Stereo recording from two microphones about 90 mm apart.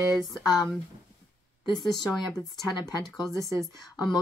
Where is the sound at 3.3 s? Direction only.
5° left (ahead or behind).